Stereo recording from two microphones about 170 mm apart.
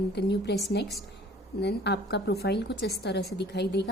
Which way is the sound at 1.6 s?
80° left.